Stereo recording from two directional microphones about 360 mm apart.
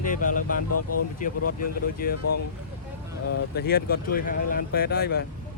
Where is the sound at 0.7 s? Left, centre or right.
Left.